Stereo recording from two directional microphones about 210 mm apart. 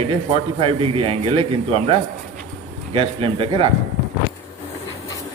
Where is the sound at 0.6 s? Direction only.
25° right (ahead or behind).